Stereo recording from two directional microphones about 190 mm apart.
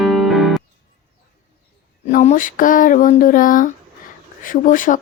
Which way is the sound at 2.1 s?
40° left (ahead or behind).